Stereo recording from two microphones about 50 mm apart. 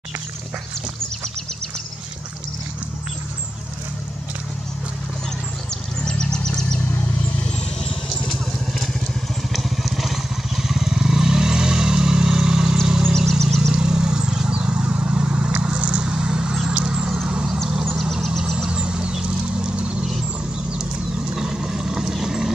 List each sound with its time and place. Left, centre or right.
6.0 s a sound: centre
7.4 s vehicle: centre
13.2 s vehicle: centre
13.7 s vehicle: centre
18.1 s vehicle: centre
18.7 s vehicle: centre
21.4 s vehicle: centre